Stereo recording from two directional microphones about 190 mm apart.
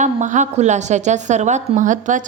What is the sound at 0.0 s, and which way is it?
A woman's voice, 40° right (ahead or behind).